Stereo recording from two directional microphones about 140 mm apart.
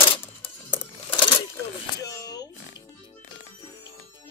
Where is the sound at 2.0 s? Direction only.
25° left (ahead or behind).